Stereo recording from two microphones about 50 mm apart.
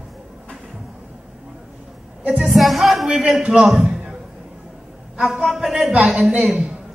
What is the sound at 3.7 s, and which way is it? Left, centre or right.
Music, centre.